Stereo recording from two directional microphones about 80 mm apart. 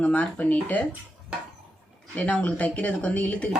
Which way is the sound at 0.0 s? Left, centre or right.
Centre.